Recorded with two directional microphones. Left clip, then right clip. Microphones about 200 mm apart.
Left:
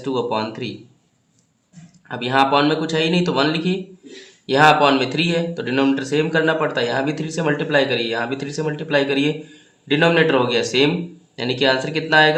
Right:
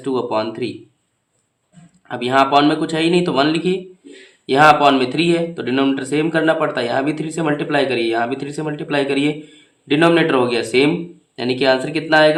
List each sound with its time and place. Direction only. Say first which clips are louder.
0.0 s speech: right 2 dB; 20° right (ahead or behind)
2.0 s speech: right 2 dB; 20° right (ahead or behind)